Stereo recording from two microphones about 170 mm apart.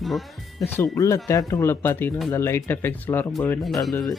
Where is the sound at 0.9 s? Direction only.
20° left (ahead or behind).